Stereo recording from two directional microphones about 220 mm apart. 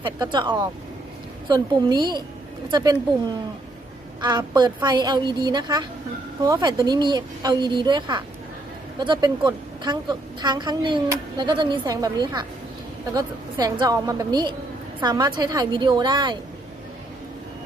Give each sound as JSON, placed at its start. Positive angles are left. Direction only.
{"t": 0.0, "sound": "a woman's voice", "side_deg": -20}
{"t": 4.2, "sound": "a woman's voice", "side_deg": -20}